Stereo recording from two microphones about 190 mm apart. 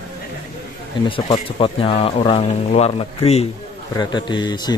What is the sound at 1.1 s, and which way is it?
Speech, 30° left (ahead or behind).